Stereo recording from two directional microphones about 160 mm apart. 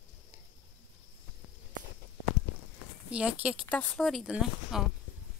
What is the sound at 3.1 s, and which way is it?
Speech, 5° right (ahead or behind).